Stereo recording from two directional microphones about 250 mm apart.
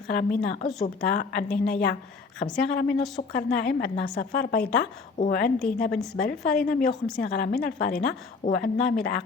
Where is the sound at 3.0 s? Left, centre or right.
Centre.